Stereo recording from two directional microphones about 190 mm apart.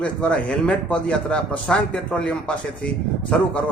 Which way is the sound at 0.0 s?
5° left (ahead or behind).